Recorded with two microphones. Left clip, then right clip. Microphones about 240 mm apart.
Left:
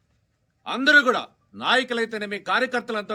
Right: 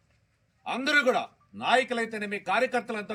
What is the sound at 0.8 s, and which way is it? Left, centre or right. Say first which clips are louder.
A man's voice: left 7 dB; left.